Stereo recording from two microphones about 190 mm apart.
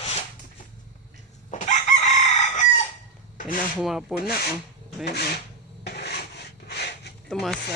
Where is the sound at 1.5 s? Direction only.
40° left (ahead or behind).